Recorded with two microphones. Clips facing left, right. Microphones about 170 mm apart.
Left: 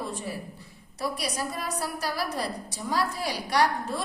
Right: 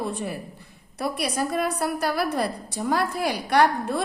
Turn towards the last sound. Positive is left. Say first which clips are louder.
# right 5 dB
turn(degrees=-55)  # may be behind; listen again after turning